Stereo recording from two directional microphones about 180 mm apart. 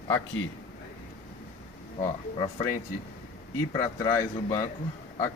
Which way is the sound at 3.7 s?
15° left (ahead or behind).